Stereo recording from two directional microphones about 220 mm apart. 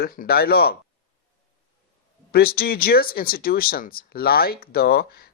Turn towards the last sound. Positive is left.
turn(degrees=45)  # may be behind; listen again after turning